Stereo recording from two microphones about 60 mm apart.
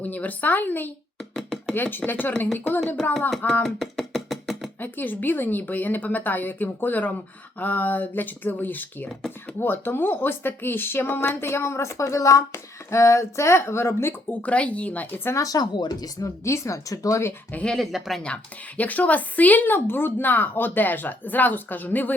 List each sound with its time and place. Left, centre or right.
0.0 s speech: left
1.4 s chopping: centre
1.7 s speech: left
3.0 s speech: centre
3.6 s chopping: centre
4.8 s speech: left
14.3 s speech: left
15.4 s speech: left
16.4 s speech: left
17.9 s speech: centre
18.8 s speech: left